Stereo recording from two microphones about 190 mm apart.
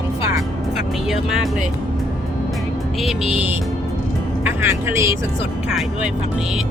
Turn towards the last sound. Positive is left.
turn(degrees=-15)  # may be behind; listen again after turning